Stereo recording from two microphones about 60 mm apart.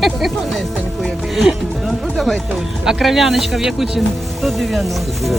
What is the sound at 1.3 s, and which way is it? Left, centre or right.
Speech, centre.